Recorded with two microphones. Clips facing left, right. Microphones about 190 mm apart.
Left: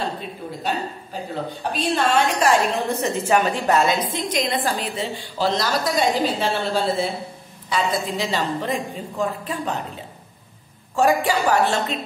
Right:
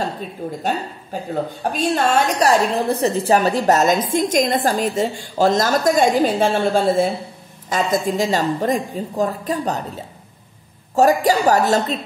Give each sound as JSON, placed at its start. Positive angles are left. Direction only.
{"t": 1.1, "sound": "a woman's voice", "side_deg": -50}
{"t": 11.0, "sound": "a woman's voice", "side_deg": -40}